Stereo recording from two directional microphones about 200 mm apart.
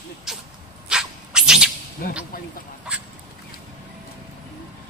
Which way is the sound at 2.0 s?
45° left (ahead or behind).